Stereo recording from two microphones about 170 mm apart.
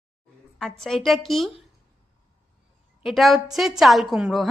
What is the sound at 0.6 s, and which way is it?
Speech, centre (ahead or behind).